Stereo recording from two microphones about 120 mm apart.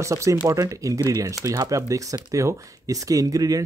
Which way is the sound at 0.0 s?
25° right (ahead or behind).